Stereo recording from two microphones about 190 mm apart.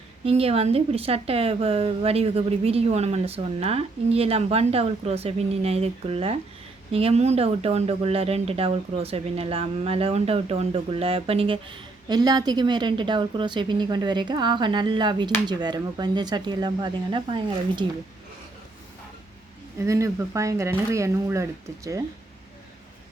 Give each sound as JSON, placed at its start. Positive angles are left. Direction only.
{"t": 0.3, "sound": "a woman's voice", "side_deg": -30}
{"t": 19.8, "sound": "speech", "side_deg": -15}